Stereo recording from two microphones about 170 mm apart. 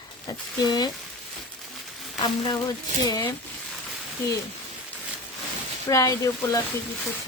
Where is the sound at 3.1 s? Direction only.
20° left (ahead or behind).